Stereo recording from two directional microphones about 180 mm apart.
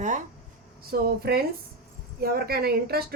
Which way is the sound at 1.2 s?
60° right (ahead or behind).